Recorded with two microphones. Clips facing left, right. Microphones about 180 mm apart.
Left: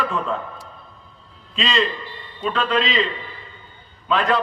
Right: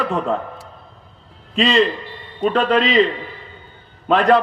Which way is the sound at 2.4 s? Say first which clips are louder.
Right 6 dB; 40° right (ahead or behind).